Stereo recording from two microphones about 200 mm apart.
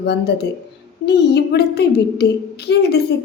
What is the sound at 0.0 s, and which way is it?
A woman's voice, 55° left (ahead or behind).